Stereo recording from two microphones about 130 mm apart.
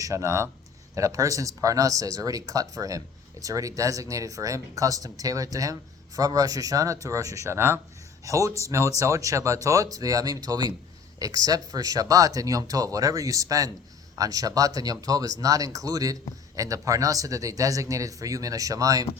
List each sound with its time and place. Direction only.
0.0 s speech: 25° right (ahead or behind)